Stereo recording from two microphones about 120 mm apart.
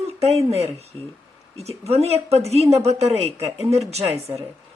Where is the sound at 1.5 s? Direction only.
60° right (ahead or behind).